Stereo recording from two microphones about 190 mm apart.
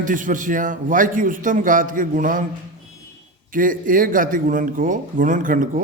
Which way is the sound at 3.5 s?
45° right (ahead or behind).